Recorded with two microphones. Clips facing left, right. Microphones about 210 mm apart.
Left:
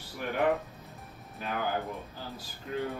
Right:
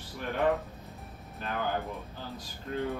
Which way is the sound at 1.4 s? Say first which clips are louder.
Even; 5° left (ahead or behind).